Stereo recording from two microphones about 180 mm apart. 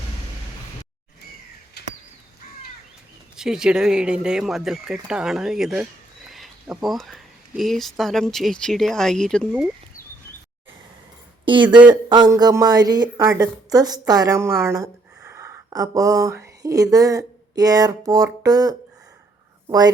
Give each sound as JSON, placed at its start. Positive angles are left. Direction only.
{"t": 1.8, "sound": "a sound", "side_deg": 65}
{"t": 3.3, "sound": "speech", "side_deg": -5}
{"t": 11.4, "sound": "a woman's voice", "side_deg": -25}